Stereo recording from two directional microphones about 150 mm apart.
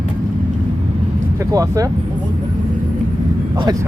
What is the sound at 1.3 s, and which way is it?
Speech, 20° right (ahead or behind).